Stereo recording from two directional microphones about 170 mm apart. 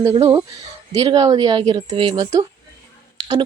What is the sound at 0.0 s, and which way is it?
Speech, 20° right (ahead or behind).